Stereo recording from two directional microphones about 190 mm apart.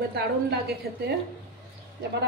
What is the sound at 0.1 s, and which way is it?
A woman's voice, 60° right (ahead or behind).